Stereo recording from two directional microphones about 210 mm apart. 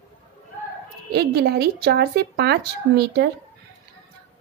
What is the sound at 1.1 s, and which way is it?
Speech, 50° right (ahead or behind).